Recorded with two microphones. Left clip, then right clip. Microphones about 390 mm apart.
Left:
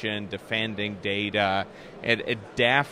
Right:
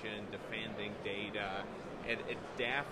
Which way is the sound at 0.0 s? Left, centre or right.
Left.